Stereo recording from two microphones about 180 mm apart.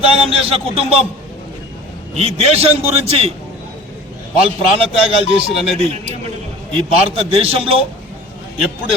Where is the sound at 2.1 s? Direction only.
30° right (ahead or behind).